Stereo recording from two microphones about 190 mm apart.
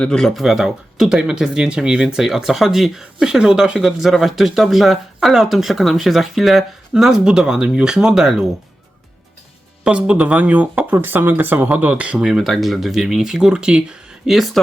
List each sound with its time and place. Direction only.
0.0 s speech: 5° left (ahead or behind)
9.8 s speech: 5° right (ahead or behind)